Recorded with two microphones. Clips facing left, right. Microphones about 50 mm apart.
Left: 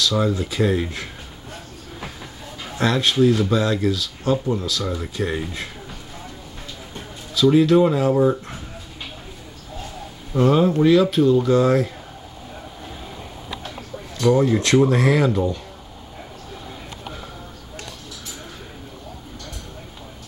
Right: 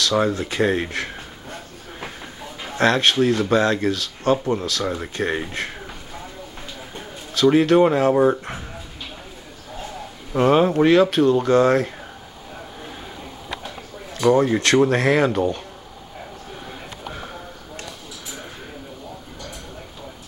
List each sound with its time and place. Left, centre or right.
0.1 s speech: right
2.8 s speech: right
4.8 s speech: right
5.1 s speech: right
7.3 s speech: right
10.3 s speech: right
14.3 s speech: right
14.9 s speech: right
15.3 s speech: right